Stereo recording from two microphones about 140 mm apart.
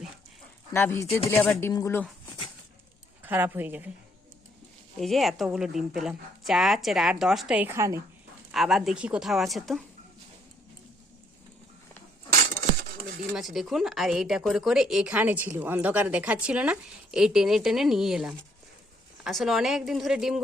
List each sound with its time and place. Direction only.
0.7 s speech: 15° left (ahead or behind)
3.2 s a woman's voice: 15° right (ahead or behind)
4.9 s speech: centre (ahead or behind); by 8.0 s 20° right (ahead or behind)
8.5 s speech: centre (ahead or behind)
13.3 s speech: centre (ahead or behind)